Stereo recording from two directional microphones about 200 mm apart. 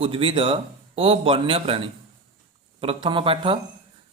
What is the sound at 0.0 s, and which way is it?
Speech, 25° right (ahead or behind).